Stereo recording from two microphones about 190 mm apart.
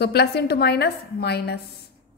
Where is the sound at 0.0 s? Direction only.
60° left (ahead or behind).